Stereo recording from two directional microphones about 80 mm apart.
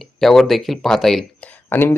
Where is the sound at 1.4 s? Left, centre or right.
Left.